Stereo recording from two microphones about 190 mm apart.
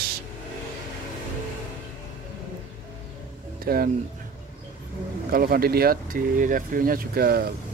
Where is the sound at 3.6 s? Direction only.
50° right (ahead or behind).